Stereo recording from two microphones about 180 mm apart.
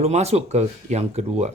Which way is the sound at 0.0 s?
35° right (ahead or behind).